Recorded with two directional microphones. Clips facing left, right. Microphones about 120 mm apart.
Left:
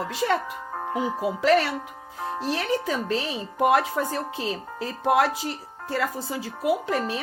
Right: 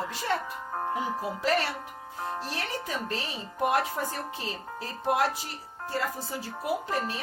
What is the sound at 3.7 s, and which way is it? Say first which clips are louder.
Speech: left 5 dB; 90° left.